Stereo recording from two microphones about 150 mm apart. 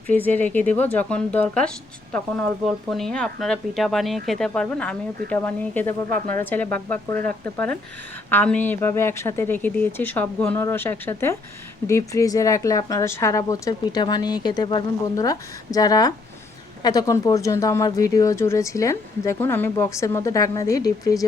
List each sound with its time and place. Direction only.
0.1 s speech: 10° left (ahead or behind)